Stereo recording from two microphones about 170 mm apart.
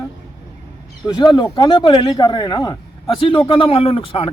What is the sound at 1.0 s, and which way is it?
A man's voice, 25° left (ahead or behind).